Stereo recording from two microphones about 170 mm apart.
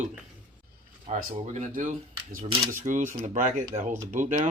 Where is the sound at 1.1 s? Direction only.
45° right (ahead or behind).